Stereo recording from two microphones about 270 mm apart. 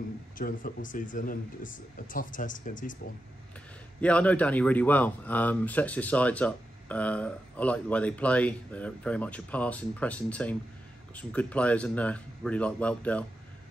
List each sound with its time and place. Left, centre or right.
0.4 s speech: left
4.0 s speech: centre